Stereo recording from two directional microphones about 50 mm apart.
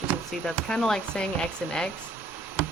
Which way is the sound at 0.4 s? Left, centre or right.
Centre.